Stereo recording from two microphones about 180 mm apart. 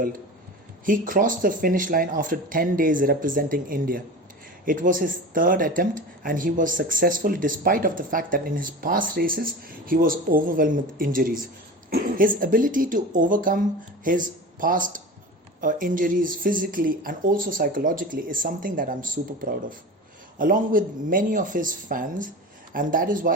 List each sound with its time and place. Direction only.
0.9 s speech: 50° right (ahead or behind)